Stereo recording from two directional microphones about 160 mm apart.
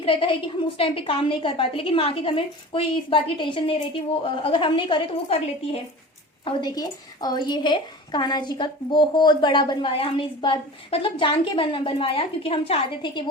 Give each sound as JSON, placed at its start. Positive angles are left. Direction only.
{"t": 0.0, "sound": "a woman's voice", "side_deg": 35}
{"t": 6.4, "sound": "a woman's voice", "side_deg": 25}